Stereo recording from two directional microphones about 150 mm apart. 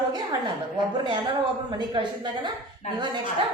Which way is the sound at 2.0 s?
30° right (ahead or behind).